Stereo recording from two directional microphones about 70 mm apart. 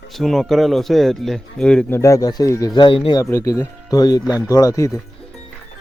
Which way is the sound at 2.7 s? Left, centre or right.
Left.